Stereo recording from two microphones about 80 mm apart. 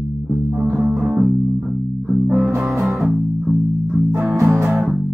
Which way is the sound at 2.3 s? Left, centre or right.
Right.